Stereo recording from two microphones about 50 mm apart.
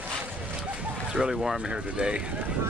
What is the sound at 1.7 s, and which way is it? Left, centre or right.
Speech, centre.